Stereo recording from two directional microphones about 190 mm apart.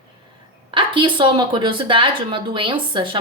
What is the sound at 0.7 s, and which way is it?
Speech, 25° right (ahead or behind).